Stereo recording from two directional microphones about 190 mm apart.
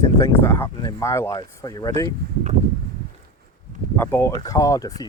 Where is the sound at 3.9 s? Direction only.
10° left (ahead or behind).